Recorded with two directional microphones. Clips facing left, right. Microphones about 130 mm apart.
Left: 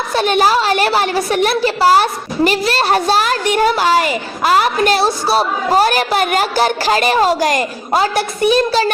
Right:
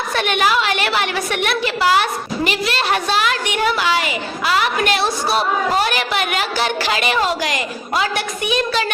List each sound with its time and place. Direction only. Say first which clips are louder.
0.1 s a woman's voice: left 5 dB; 35° left (ahead or behind)